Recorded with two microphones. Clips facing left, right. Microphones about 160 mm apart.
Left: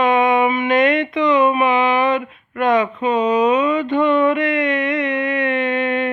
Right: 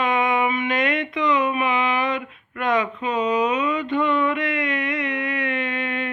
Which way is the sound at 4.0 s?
65° left (ahead or behind).